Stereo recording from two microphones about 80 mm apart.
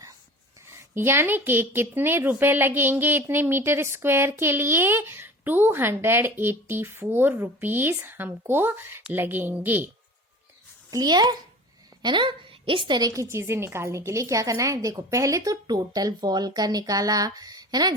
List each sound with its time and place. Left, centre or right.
0.7 s a woman's voice: right
10.9 s a child's voice: right
12.0 s a woman's voice: right
13.0 s a woman's voice: right
15.6 s speech: right